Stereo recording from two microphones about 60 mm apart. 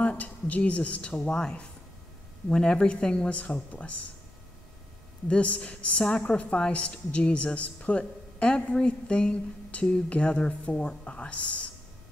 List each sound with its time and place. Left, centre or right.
0.0 s a woman's voice: left
5.3 s a woman's voice: left